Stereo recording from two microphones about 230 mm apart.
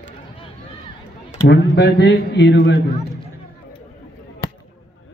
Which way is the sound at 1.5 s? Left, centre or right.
Left.